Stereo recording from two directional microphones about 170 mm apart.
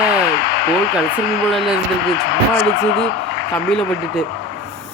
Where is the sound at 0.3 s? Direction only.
70° left (ahead or behind).